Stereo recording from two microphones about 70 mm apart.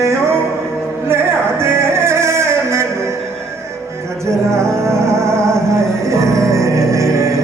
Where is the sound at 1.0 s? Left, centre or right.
Right.